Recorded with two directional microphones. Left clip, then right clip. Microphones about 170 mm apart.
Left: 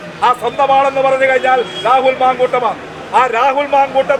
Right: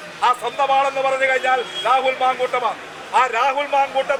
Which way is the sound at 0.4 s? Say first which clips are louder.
Left 6 dB; 10° left (ahead or behind).